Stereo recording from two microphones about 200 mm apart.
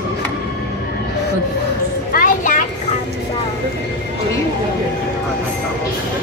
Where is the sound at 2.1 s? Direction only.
45° left (ahead or behind).